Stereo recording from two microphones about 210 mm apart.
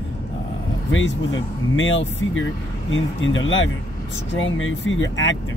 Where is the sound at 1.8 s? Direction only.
65° left (ahead or behind).